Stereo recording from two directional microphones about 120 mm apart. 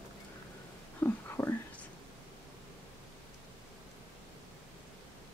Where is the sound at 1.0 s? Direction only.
20° left (ahead or behind).